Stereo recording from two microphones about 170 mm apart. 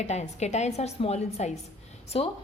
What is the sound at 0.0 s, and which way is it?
A woman's voice, 40° left (ahead or behind).